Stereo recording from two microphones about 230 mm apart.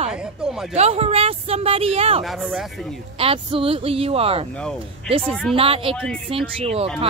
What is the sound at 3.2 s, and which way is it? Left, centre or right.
Speech, right.